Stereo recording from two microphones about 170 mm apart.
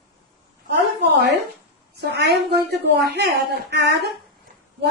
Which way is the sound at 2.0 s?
70° right (ahead or behind).